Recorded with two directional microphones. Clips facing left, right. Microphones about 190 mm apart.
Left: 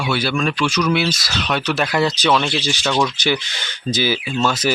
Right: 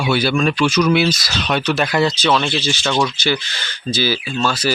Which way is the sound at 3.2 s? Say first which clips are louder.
Even; 20° left (ahead or behind).